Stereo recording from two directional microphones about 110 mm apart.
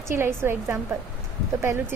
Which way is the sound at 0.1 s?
20° right (ahead or behind).